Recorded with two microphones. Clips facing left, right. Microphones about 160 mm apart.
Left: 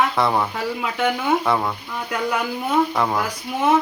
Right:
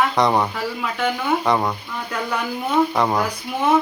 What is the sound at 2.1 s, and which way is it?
Speech, 5° left (ahead or behind).